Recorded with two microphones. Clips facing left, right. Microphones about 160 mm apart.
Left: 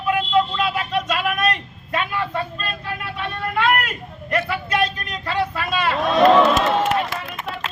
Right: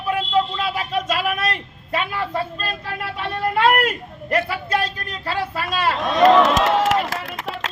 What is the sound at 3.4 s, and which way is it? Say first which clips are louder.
A man's voice: right 3 dB; 35° right (ahead or behind).